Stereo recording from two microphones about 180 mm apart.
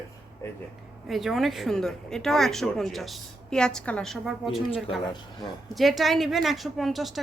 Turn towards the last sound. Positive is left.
turn(degrees=0)  # may be behind; listen again after turning